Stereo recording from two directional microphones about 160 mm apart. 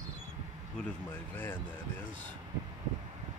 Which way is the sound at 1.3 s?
10° left (ahead or behind).